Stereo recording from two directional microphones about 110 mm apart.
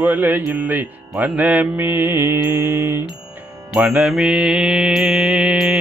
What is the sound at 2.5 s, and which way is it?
Mantra, 20° right (ahead or behind).